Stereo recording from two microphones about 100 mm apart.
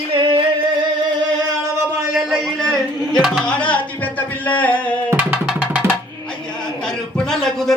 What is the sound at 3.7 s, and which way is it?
Music, 15° left (ahead or behind).